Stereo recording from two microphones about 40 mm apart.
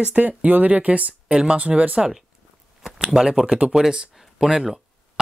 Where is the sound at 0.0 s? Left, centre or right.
Right.